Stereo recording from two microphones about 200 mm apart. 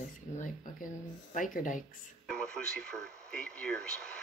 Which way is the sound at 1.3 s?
40° left (ahead or behind).